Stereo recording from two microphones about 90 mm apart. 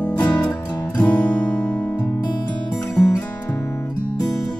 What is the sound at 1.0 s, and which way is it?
Guitar, 15° left (ahead or behind).